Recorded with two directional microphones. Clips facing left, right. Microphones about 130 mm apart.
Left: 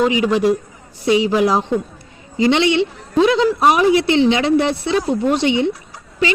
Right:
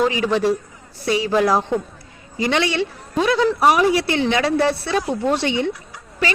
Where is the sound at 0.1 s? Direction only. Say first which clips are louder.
Left 3 dB; 15° left (ahead or behind).